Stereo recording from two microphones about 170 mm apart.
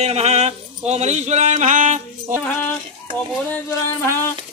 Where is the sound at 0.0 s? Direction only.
40° right (ahead or behind).